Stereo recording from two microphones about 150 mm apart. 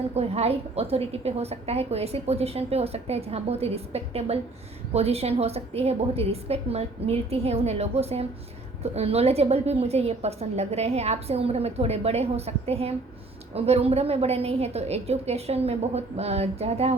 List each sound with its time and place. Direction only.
0.1 s a woman's voice: 45° right (ahead or behind)